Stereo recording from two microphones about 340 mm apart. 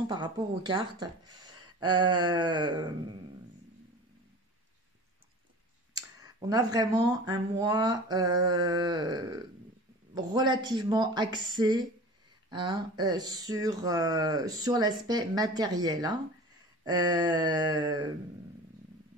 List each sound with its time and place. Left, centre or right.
0.1 s speech: centre
5.9 s speech: centre